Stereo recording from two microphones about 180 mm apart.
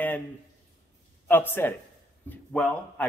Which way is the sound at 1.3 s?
10° left (ahead or behind).